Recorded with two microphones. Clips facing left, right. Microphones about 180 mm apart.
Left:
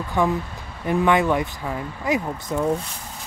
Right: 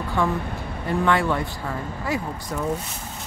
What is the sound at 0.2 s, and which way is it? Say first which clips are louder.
Speech: left 3 dB; 15° left (ahead or behind).